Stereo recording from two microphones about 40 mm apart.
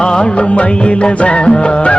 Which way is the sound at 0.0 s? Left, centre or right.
Left.